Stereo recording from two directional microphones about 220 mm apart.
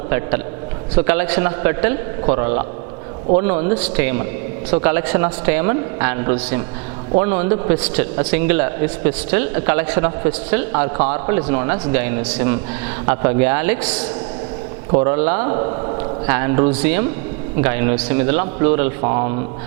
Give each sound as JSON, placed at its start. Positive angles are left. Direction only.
{"t": 0.1, "sound": "a man's voice", "side_deg": -20}
{"t": 3.8, "sound": "a man's voice", "side_deg": -10}
{"t": 7.8, "sound": "a man's voice", "side_deg": -10}
{"t": 13.1, "sound": "a man's voice", "side_deg": -20}
{"t": 14.9, "sound": "a man's voice", "side_deg": -25}
{"t": 16.7, "sound": "a man's voice", "side_deg": -10}